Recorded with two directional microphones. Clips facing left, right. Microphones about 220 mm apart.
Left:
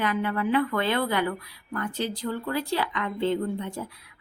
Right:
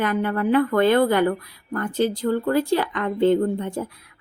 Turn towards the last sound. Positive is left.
turn(degrees=-50)  # may be behind; listen again after turning